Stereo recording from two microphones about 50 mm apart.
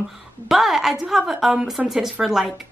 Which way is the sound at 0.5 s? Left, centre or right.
Centre.